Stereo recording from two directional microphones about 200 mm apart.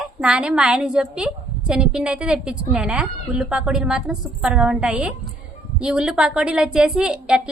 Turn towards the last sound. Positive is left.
turn(degrees=-5)  # may be behind; listen again after turning